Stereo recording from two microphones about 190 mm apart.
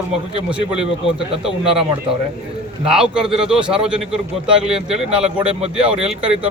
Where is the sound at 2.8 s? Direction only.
5° right (ahead or behind).